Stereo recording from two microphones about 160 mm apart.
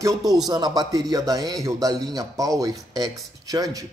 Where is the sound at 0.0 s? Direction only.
20° right (ahead or behind).